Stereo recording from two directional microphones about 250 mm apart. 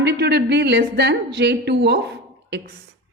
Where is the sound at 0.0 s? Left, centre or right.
Right.